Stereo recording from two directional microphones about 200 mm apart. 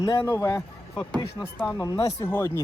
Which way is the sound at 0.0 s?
25° left (ahead or behind).